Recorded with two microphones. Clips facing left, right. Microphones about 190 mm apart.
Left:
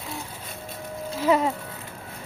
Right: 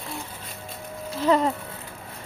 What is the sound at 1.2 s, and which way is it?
Speech, 10° left (ahead or behind).